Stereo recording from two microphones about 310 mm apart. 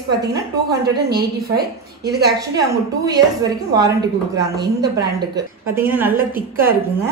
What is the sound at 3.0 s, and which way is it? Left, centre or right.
A woman's voice, centre.